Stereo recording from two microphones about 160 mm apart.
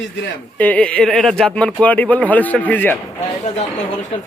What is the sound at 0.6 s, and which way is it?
A man's voice, 10° left (ahead or behind).